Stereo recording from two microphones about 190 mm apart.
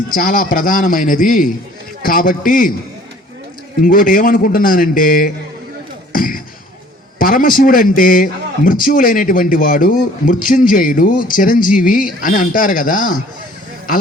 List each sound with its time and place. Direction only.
0.1 s a man's voice: 45° left (ahead or behind)
3.8 s a man's voice: 45° left (ahead or behind)